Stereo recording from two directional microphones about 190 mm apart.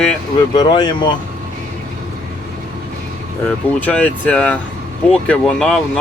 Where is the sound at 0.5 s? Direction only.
25° left (ahead or behind).